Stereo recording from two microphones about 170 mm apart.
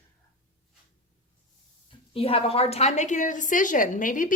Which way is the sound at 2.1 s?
35° left (ahead or behind).